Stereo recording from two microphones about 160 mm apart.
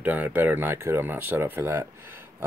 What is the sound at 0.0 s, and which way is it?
Speech, 10° right (ahead or behind).